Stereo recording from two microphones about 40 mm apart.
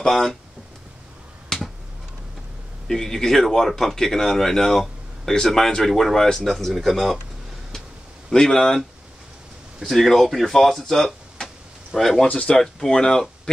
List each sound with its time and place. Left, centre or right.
0.0 s speech: centre
1.5 s finger snapping: centre
2.9 s speech: centre
8.3 s speech: centre
9.9 s speech: centre
12.3 s speech: left
12.5 s speech: centre